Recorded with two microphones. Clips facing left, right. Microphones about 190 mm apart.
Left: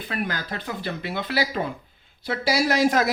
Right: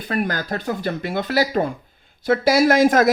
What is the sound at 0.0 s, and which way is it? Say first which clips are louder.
Speech: right 6 dB; 45° right (ahead or behind).